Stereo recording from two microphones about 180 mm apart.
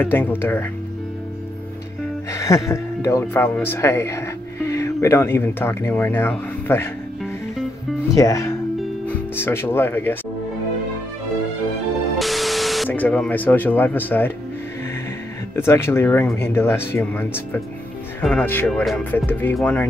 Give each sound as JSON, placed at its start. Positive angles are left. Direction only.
{"t": 0.0, "sound": "speech", "side_deg": 10}
{"t": 2.3, "sound": "speech", "side_deg": 15}
{"t": 8.1, "sound": "speech", "side_deg": 20}
{"t": 12.2, "sound": "speech", "side_deg": 0}
{"t": 15.5, "sound": "speech", "side_deg": 15}